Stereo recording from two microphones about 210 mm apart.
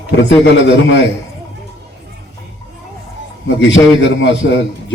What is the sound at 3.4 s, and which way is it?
A man's voice, 60° left (ahead or behind).